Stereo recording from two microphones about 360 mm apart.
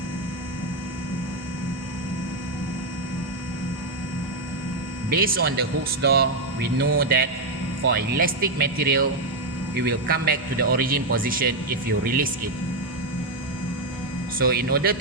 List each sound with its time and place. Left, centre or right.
5.0 s speech: right
14.3 s speech: right